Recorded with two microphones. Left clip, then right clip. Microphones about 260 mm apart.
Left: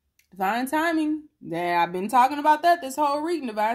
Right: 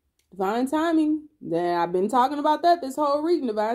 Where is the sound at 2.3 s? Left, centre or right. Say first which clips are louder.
Left 1 dB; left.